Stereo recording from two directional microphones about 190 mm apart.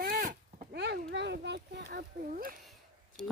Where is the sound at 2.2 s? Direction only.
45° right (ahead or behind).